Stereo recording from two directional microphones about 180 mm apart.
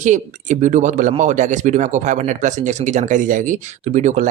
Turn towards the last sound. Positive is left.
turn(degrees=-40)  # may be behind; listen again after turning